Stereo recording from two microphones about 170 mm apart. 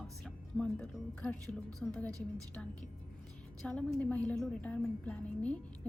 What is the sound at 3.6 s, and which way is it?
A woman's voice, 5° left (ahead or behind).